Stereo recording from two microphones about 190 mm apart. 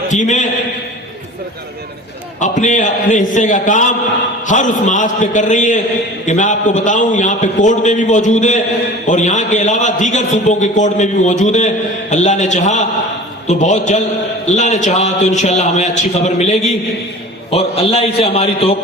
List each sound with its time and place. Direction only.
0.1 s a man's voice: 40° left (ahead or behind)
2.4 s a man's voice: 40° left (ahead or behind)